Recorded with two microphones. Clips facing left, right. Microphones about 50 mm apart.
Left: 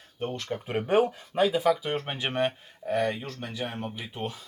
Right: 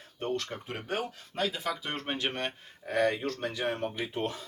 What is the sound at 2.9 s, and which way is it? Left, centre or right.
Speech, right.